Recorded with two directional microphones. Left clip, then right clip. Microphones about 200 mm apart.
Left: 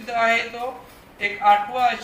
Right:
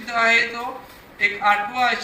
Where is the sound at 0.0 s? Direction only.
5° right (ahead or behind).